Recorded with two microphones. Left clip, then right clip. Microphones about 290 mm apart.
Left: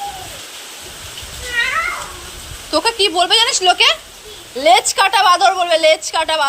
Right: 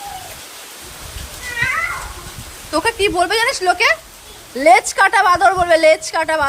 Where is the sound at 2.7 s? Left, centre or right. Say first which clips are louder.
Left 1 dB; centre.